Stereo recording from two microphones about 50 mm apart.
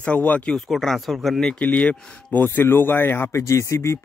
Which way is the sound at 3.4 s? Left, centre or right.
Left.